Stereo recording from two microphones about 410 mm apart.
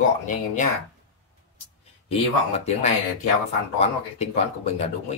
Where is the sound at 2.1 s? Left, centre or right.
Centre.